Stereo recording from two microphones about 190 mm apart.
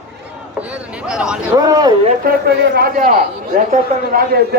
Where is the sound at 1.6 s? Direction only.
20° right (ahead or behind).